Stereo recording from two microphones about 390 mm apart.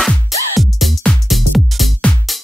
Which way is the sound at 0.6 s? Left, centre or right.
Centre.